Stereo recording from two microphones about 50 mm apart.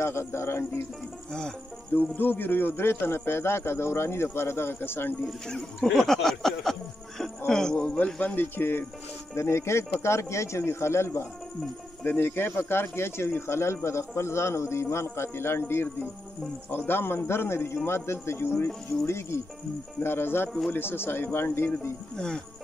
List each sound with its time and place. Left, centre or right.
0.0 s speech: left
2.0 s a man's voice: left
5.2 s speech: centre
8.0 s speech: left
8.5 s a man's voice: left
9.3 s speech: left
12.0 s a man's voice: left
20.0 s a man's voice: left
22.1 s speech: centre